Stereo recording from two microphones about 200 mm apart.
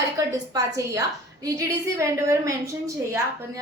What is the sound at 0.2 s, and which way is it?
A woman's voice, 15° right (ahead or behind).